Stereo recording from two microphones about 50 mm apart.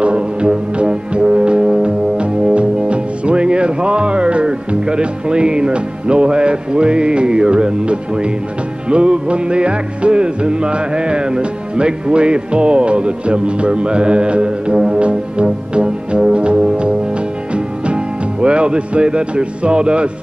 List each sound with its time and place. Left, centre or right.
0.0 s music: centre
18.4 s speech: right